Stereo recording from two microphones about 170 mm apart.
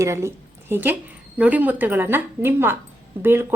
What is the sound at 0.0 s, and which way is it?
A woman's voice, 15° right (ahead or behind).